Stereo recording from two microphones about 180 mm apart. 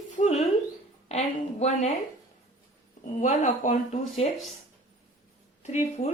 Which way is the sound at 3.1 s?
45° left (ahead or behind).